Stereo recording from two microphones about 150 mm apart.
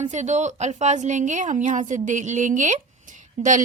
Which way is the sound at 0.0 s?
50° right (ahead or behind).